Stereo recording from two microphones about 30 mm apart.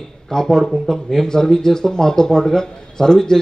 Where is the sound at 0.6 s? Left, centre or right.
Centre.